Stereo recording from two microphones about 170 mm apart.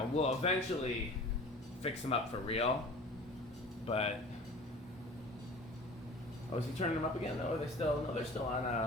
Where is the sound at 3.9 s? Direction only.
35° left (ahead or behind).